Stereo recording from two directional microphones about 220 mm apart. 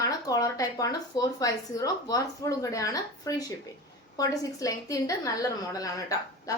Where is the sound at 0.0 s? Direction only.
15° left (ahead or behind).